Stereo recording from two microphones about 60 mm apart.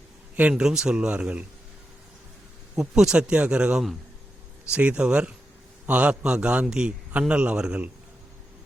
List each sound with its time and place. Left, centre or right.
0.3 s speech: right
0.6 s a man's voice: centre
2.7 s a man's voice: centre